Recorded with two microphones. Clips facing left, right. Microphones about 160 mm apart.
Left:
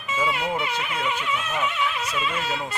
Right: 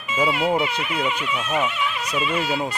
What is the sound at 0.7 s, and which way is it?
Speech, 15° right (ahead or behind).